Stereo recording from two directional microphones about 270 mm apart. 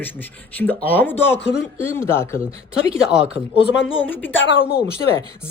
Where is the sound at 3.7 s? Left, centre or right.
Left.